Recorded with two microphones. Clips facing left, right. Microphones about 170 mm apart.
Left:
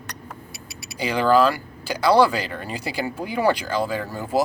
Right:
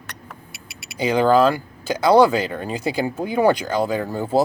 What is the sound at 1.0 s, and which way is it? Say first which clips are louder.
Speech: right 2 dB; 25° right (ahead or behind).